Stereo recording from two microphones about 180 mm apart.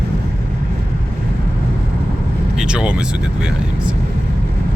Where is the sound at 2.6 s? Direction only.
5° right (ahead or behind).